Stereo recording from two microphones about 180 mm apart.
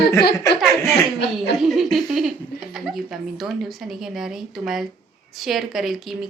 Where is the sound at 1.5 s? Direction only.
Centre (ahead or behind).